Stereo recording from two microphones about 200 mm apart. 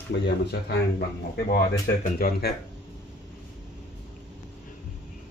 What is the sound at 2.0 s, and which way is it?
Speech, 50° left (ahead or behind).